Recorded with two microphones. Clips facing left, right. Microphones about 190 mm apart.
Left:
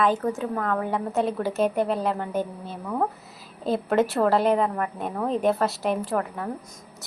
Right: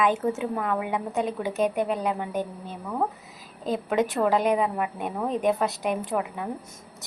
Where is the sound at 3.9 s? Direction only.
5° right (ahead or behind).